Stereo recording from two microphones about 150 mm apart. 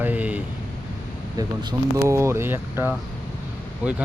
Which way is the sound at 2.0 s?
20° right (ahead or behind).